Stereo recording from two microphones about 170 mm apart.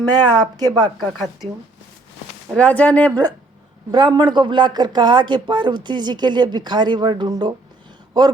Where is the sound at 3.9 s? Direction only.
25° right (ahead or behind).